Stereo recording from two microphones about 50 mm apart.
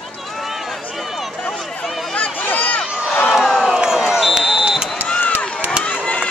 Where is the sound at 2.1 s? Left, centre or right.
Left.